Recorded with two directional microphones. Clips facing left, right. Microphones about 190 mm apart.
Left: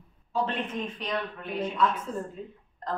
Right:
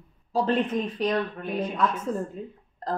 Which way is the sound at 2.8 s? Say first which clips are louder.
Right 3 dB; 35° right (ahead or behind).